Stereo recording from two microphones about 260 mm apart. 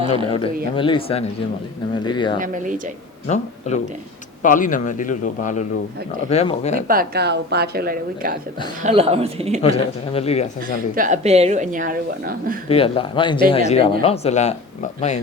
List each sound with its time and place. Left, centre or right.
0.1 s speech: left
2.4 s a woman's voice: right
3.2 s speech: left
6.8 s a woman's voice: right
8.8 s speech: right
9.6 s speech: left
10.9 s a woman's voice: right
12.6 s speech: left